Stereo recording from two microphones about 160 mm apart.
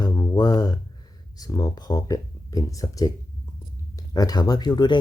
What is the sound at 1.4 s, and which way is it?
Speech, 25° left (ahead or behind).